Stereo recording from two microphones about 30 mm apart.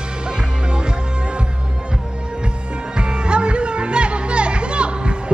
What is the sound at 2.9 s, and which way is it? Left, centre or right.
Music, right.